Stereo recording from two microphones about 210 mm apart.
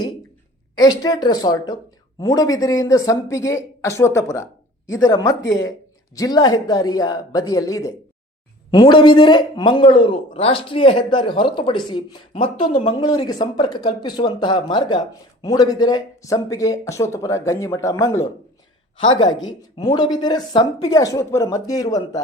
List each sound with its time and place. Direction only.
0.8 s speech: 20° left (ahead or behind)